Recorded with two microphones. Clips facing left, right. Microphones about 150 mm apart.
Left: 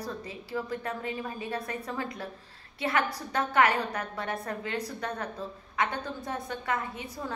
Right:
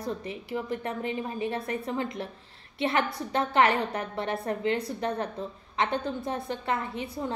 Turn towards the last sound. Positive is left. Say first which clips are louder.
# right 4 dB
turn(degrees=-25)  # may be behind; listen again after turning